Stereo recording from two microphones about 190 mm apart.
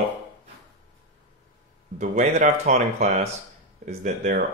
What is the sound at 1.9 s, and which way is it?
Speech, 40° right (ahead or behind).